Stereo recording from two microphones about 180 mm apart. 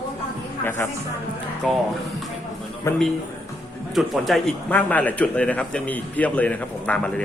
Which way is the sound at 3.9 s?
Centre (ahead or behind).